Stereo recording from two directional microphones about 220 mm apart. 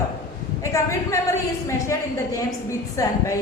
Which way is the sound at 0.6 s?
15° left (ahead or behind).